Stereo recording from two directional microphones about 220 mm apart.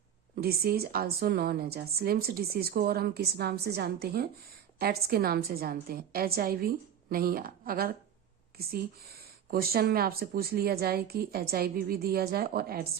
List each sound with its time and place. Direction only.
0.3 s speech: 45° right (ahead or behind)